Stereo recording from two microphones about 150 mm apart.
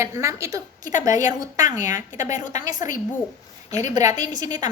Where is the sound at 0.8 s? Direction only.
60° left (ahead or behind).